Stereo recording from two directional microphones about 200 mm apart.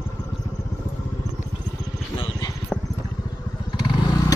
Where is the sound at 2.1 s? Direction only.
25° left (ahead or behind).